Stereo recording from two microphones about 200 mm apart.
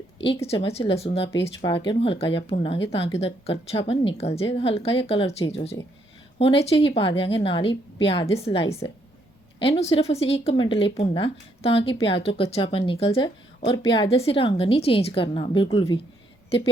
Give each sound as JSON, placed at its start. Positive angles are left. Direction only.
{"t": 0.4, "sound": "speech", "side_deg": 30}